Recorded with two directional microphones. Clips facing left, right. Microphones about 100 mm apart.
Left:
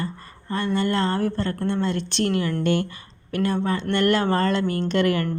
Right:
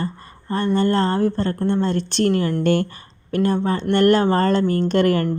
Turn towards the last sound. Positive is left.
turn(degrees=-40)  # may be behind; listen again after turning